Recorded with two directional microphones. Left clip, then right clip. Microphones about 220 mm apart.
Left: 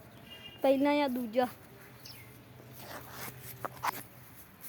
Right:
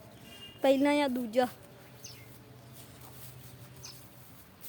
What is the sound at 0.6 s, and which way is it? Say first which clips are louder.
Speech: right 1 dB; 10° right (ahead or behind).